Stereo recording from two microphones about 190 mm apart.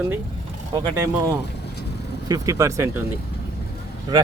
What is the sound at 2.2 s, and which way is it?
Speech, 20° right (ahead or behind).